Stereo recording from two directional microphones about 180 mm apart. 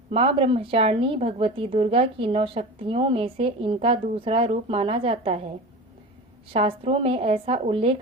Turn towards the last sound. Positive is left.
turn(degrees=-30)  # may be behind; listen again after turning